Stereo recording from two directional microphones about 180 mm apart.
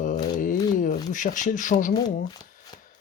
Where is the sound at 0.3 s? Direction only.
45° left (ahead or behind).